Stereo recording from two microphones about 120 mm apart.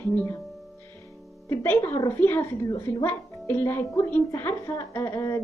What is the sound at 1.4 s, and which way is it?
Speech, 20° left (ahead or behind).